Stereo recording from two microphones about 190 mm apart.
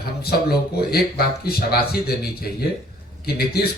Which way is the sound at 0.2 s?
55° left (ahead or behind).